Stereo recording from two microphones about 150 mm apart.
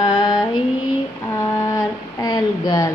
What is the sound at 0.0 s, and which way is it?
Carnatic music, 25° left (ahead or behind).